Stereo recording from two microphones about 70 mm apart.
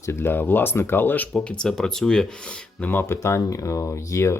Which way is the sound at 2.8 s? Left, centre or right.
Left.